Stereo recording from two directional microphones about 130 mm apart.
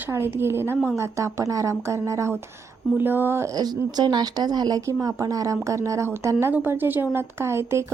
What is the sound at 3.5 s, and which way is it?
Speech, 30° right (ahead or behind).